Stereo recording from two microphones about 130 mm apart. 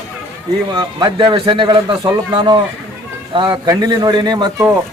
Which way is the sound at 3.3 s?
40° right (ahead or behind).